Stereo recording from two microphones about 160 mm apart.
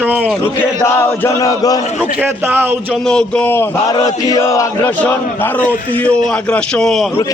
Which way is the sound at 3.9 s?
25° left (ahead or behind).